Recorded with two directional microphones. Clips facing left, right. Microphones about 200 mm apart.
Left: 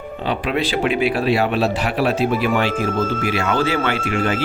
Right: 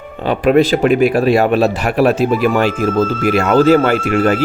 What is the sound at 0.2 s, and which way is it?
A man's voice, 50° right (ahead or behind).